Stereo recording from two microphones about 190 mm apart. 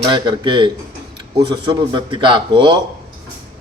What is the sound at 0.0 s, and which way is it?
A man's voice, 25° right (ahead or behind).